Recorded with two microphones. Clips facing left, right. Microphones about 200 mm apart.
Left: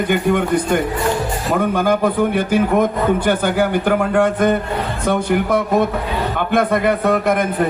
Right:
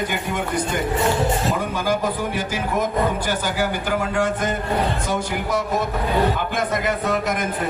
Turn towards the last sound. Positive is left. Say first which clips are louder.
# left 6 dB
turn(degrees=60)  # may be behind; listen again after turning